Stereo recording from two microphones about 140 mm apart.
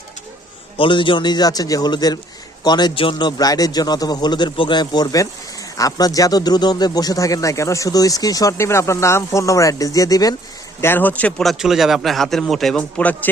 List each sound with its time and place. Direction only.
0.8 s a man's voice: 35° left (ahead or behind)
10.8 s speech: 15° left (ahead or behind)